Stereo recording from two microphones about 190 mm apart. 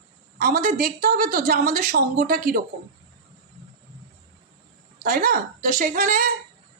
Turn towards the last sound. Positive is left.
turn(degrees=-45)  # may be behind; listen again after turning